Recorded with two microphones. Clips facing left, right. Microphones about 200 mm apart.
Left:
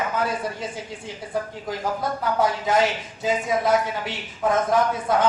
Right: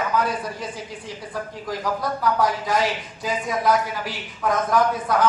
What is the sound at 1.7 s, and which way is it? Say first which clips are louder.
Speech: right 4 dB; 25° left (ahead or behind).